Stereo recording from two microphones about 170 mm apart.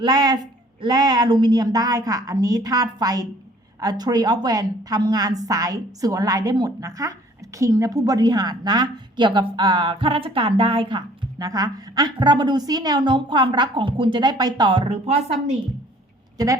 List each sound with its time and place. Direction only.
0.0 s a woman's voice: 25° right (ahead or behind)